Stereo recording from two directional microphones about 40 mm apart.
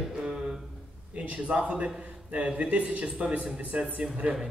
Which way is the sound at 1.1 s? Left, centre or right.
Right.